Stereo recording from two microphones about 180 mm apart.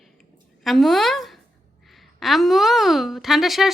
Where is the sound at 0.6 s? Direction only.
Centre (ahead or behind).